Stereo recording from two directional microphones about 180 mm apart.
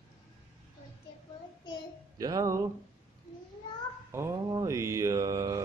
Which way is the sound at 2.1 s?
20° right (ahead or behind).